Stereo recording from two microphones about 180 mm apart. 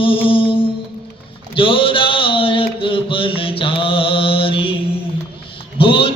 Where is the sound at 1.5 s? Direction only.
30° left (ahead or behind).